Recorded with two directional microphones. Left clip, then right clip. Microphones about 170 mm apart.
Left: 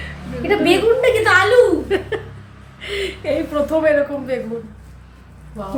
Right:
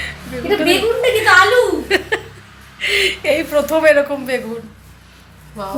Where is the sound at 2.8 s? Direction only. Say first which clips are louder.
Right 8 dB; 10° right (ahead or behind).